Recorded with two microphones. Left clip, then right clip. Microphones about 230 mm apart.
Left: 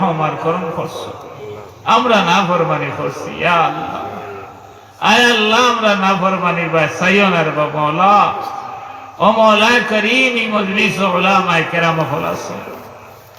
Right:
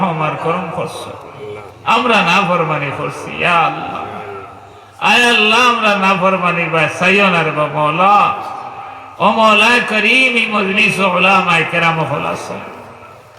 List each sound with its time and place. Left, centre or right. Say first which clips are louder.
0.0 s a sound: even; right
1.9 s a man's voice: even; right
4.9 s a man's voice: right 1 dB; right